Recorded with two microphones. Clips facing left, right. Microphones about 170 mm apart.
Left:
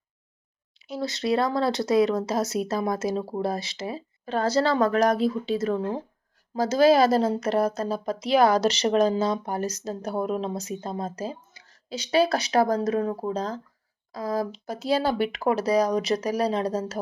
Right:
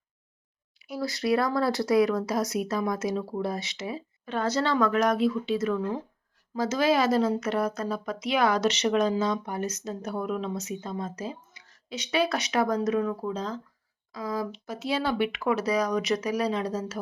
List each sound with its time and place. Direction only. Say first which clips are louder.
0.8 s speech: left 1 dB; 25° left (ahead or behind)